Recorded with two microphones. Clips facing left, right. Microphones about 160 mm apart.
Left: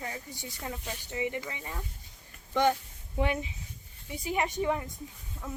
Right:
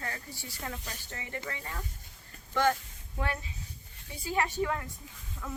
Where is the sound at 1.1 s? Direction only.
15° left (ahead or behind).